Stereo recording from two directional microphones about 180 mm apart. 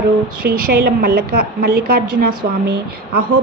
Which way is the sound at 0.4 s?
55° right (ahead or behind).